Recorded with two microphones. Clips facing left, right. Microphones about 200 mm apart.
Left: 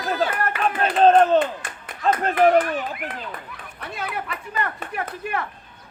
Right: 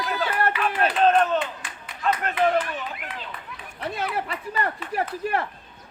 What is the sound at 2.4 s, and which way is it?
Speech, 50° left (ahead or behind).